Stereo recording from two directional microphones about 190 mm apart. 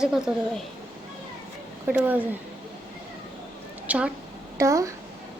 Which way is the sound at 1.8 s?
10° right (ahead or behind).